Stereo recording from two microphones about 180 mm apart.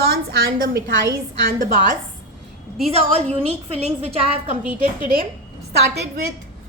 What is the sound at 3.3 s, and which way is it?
Speech, 35° right (ahead or behind).